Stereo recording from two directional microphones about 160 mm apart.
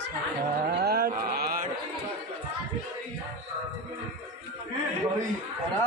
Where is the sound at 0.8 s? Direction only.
80° right.